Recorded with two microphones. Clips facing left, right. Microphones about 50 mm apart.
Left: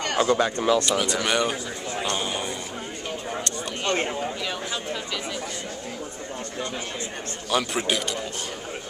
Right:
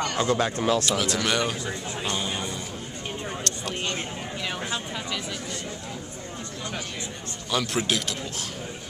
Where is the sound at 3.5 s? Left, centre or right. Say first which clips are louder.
Left 1 dB; centre.